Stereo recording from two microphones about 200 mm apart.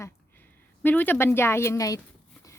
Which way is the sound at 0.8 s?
10° left (ahead or behind).